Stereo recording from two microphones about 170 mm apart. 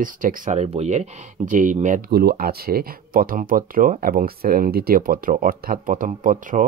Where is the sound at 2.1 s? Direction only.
65° right (ahead or behind).